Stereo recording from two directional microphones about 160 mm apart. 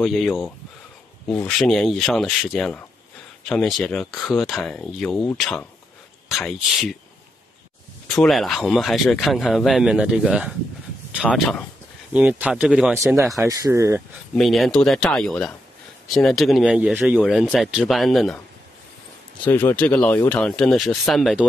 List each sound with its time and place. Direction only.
0.0 s speech: centre (ahead or behind)
1.5 s speech: 5° left (ahead or behind)
8.1 s speech: centre (ahead or behind)
13.4 s speech: 20° right (ahead or behind)
14.3 s speech: centre (ahead or behind)
19.4 s speech: 10° left (ahead or behind)